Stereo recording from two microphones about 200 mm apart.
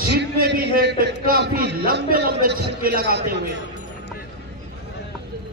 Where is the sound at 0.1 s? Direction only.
60° right (ahead or behind).